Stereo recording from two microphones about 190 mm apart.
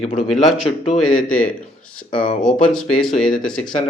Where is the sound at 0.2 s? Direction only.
Centre (ahead or behind).